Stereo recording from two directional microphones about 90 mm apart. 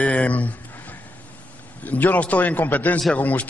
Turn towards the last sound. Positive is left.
turn(degrees=20)  # may be behind; listen again after turning